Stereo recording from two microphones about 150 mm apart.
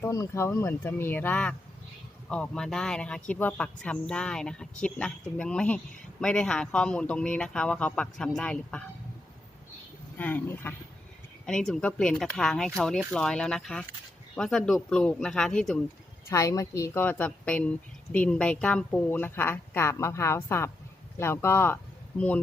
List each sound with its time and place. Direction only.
0.0 s speech: 20° left (ahead or behind)
10.2 s speech: 10° left (ahead or behind)
16.3 s speech: 20° left (ahead or behind)